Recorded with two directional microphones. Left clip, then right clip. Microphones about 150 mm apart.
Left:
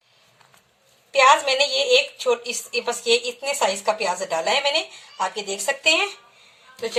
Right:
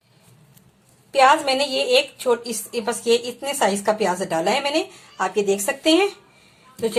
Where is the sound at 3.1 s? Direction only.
10° right (ahead or behind).